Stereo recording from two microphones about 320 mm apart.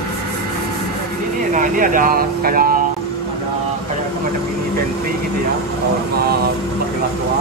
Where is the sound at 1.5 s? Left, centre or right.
Right.